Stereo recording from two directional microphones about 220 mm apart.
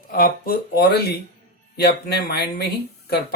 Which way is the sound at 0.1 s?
40° left (ahead or behind).